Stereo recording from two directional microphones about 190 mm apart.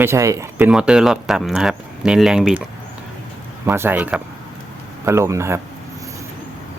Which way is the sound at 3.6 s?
10° right (ahead or behind).